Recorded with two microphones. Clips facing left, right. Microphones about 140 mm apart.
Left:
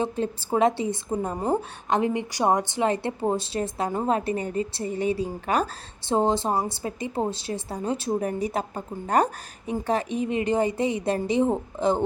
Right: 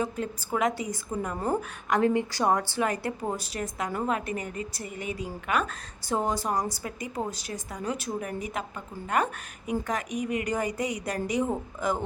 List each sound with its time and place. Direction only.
0.0 s a woman's voice: 30° left (ahead or behind)